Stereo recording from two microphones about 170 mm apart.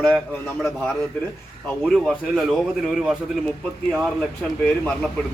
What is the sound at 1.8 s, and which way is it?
Speech, centre (ahead or behind).